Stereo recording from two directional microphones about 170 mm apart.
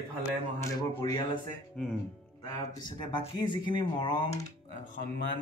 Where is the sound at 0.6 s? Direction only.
20° left (ahead or behind).